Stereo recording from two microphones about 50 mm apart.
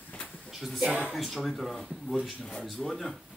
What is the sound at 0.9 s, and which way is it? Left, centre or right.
Speech, centre.